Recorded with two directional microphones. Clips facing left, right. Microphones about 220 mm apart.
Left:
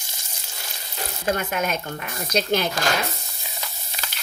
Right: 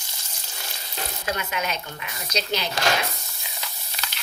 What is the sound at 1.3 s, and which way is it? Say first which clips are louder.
Speech: left 5 dB; 50° left (ahead or behind).